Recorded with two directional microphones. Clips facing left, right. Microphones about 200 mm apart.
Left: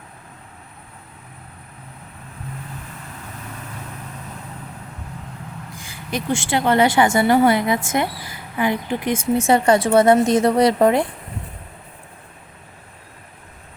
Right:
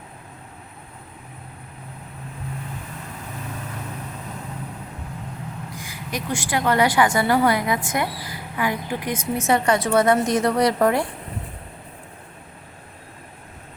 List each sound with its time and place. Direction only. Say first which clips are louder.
5.8 s a woman's voice: left 5 dB; 30° left (ahead or behind)